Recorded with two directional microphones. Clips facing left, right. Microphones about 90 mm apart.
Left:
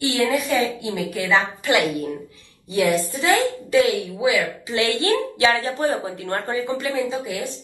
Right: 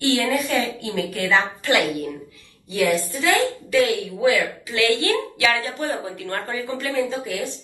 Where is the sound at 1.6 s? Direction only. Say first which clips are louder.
Left 1 dB; 20° left (ahead or behind).